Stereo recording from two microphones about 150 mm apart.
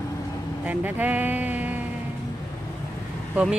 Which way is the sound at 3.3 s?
5° right (ahead or behind).